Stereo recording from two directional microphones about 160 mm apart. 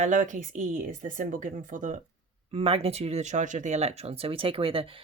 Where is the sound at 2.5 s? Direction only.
40° right (ahead or behind).